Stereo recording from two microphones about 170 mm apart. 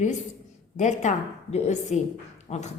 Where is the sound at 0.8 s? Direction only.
45° left (ahead or behind).